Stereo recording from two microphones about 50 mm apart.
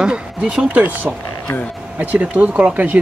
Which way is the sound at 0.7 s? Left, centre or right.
Right.